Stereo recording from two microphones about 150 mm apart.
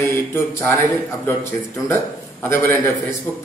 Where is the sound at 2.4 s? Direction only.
15° left (ahead or behind).